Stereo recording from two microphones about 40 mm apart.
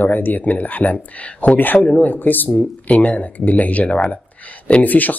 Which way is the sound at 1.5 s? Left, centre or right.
Left.